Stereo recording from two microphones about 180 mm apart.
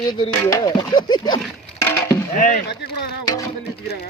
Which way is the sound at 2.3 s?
45° left (ahead or behind).